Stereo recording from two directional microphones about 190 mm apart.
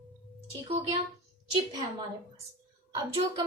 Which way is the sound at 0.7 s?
30° right (ahead or behind).